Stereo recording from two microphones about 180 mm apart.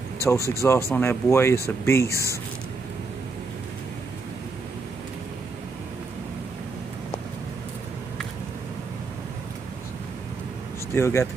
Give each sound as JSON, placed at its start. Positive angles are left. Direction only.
{"t": 0.2, "sound": "speech", "side_deg": 15}
{"t": 11.0, "sound": "speech", "side_deg": 15}